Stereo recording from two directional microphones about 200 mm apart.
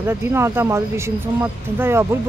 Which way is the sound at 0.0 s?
10° right (ahead or behind).